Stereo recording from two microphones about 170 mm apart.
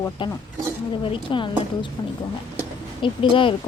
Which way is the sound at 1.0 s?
30° left (ahead or behind).